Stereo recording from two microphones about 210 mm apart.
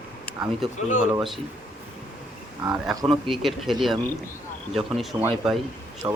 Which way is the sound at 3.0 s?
Centre (ahead or behind).